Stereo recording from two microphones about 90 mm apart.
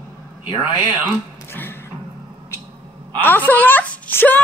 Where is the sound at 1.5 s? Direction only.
25° left (ahead or behind).